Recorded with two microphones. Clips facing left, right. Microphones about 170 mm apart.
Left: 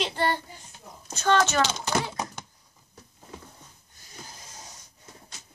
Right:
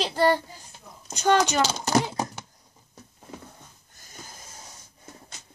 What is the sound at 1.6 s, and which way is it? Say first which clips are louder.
Speech: right 1 dB; 35° right (ahead or behind).